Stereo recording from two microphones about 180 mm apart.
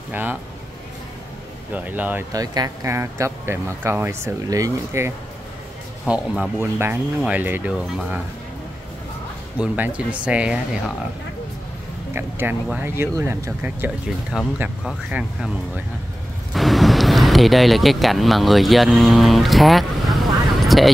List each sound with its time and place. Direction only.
0.1 s speech: 10° right (ahead or behind)
1.7 s speech: 10° right (ahead or behind)
2.3 s speech: 20° right (ahead or behind)
6.0 s speech: 5° right (ahead or behind)
9.6 s speech: 5° right (ahead or behind)
12.1 s speech: 10° right (ahead or behind)
16.5 s a sound: centre (ahead or behind)